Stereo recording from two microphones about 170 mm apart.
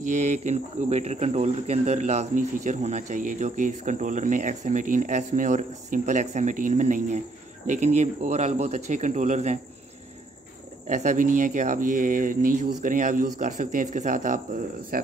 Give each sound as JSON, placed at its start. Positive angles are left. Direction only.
{"t": 0.0, "sound": "speech", "side_deg": -45}
{"t": 10.9, "sound": "speech", "side_deg": -45}